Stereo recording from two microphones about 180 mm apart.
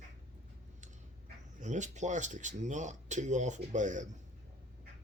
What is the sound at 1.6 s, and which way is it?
Speech, 40° right (ahead or behind).